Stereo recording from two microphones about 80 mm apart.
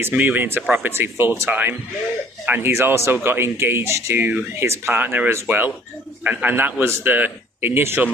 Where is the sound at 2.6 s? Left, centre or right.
Right.